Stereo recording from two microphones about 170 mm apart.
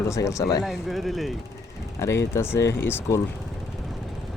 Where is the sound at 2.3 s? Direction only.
15° left (ahead or behind).